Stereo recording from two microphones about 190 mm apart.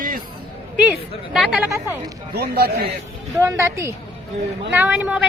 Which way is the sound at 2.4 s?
55° right (ahead or behind).